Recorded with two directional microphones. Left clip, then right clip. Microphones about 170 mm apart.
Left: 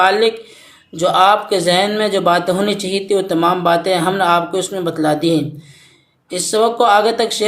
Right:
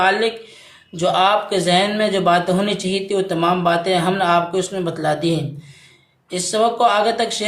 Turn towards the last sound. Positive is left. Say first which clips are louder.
# left 4 dB
turn(degrees=35)  # may be behind; listen again after turning